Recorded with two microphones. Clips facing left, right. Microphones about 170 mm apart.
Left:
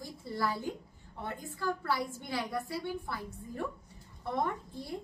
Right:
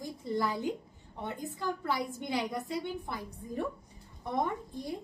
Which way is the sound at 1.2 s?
20° right (ahead or behind).